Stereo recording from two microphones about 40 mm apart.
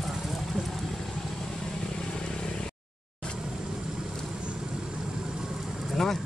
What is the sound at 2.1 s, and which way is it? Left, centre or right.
Vehicle, centre.